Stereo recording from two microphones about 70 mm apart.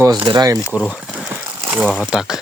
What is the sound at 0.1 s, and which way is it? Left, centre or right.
Speech, right.